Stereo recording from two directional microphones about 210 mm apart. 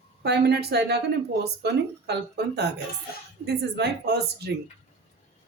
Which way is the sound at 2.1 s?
55° right (ahead or behind).